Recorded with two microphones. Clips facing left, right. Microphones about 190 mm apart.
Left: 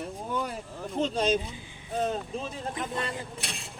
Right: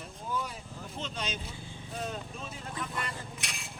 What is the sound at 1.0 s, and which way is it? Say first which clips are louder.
Speech: left 13 dB; 40° left (ahead or behind).